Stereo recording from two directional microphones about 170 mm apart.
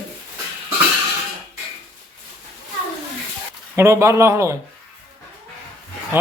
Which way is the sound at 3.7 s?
15° right (ahead or behind).